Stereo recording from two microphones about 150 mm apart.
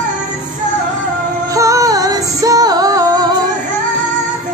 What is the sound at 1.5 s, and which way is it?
Music, 20° right (ahead or behind).